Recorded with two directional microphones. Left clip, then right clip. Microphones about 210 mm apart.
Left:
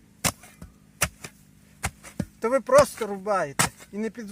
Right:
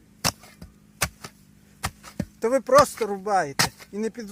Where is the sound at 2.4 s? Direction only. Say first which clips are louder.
Right 1 dB; 30° right (ahead or behind).